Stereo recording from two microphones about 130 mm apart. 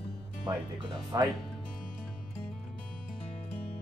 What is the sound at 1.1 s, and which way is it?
Speech, 30° right (ahead or behind).